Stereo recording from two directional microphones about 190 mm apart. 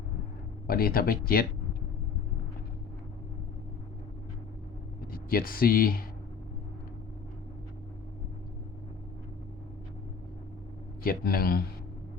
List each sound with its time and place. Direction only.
0.7 s speech: 50° left (ahead or behind)
5.1 s speech: 50° left (ahead or behind)
11.0 s speech: 50° left (ahead or behind)